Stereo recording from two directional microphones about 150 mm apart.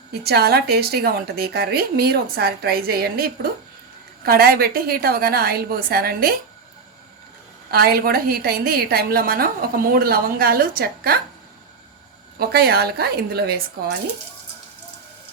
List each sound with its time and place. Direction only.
0.1 s a woman's voice: 90° right
7.7 s a woman's voice: 90° right
12.4 s a woman's voice: 90° right